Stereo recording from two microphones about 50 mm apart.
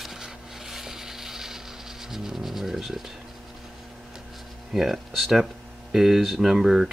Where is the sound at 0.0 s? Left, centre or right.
Centre.